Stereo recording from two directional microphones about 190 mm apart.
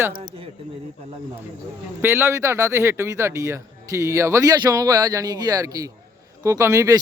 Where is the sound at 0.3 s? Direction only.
30° right (ahead or behind).